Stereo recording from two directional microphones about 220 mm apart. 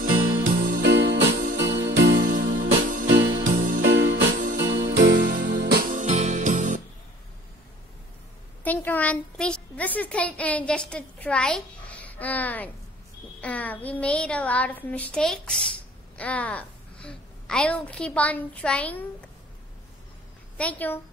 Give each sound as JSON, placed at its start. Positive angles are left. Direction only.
{"t": 0.4, "sound": "jingle bell", "side_deg": -35}
{"t": 0.8, "sound": "music", "side_deg": -50}
{"t": 2.2, "sound": "music", "side_deg": -35}
{"t": 3.1, "sound": "music", "side_deg": -55}
{"t": 3.4, "sound": "music", "side_deg": -35}
{"t": 3.9, "sound": "music", "side_deg": -55}
{"t": 5.2, "sound": "music", "side_deg": -40}
{"t": 8.6, "sound": "a woman's voice", "side_deg": 10}
{"t": 20.5, "sound": "a woman's voice", "side_deg": 5}